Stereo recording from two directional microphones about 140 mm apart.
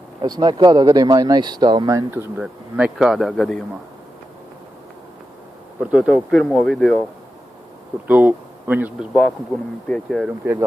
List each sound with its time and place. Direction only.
0.2 s speech: 30° right (ahead or behind)
2.4 s speech: 5° right (ahead or behind)
5.8 s speech: 5° right (ahead or behind)
8.0 s speech: 10° right (ahead or behind)
9.8 s speech: 5° left (ahead or behind)
10.2 s speech: 10° right (ahead or behind)